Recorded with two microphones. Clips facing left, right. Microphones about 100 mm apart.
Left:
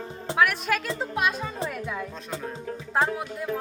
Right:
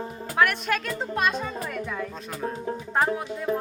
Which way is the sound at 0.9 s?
5° left (ahead or behind).